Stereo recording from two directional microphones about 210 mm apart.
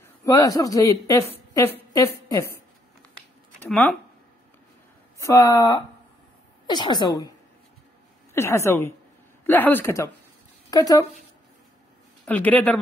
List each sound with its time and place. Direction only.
0.2 s a woman's voice: 15° left (ahead or behind)
3.6 s a woman's voice: 5° left (ahead or behind)
5.2 s a woman's voice: 15° left (ahead or behind)
8.3 s a woman's voice: 10° left (ahead or behind)
12.3 s a woman's voice: 5° left (ahead or behind)